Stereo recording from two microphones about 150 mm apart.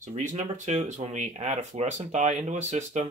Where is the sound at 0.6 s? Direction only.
50° right (ahead or behind).